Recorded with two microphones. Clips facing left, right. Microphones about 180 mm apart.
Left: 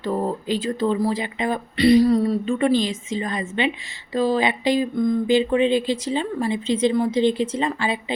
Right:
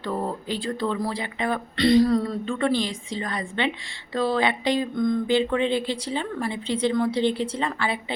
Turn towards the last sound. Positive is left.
turn(degrees=15)  # may be behind; listen again after turning